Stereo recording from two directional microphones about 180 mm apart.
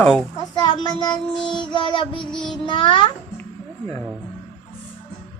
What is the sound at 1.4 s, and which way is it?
Music, 25° left (ahead or behind).